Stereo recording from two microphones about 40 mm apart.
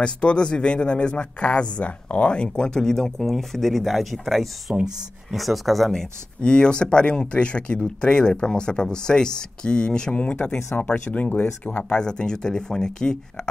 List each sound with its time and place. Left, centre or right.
0.0 s speech: left
2.3 s speech: left; by 5.9 s centre
6.4 s speech: left